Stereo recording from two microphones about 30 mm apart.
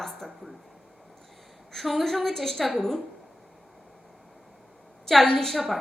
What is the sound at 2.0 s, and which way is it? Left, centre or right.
Speech, centre.